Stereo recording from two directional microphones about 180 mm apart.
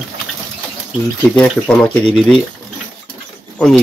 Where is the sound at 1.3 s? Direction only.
5° left (ahead or behind).